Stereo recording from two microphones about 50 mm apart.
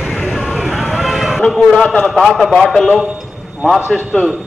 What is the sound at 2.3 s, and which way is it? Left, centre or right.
Speech, centre.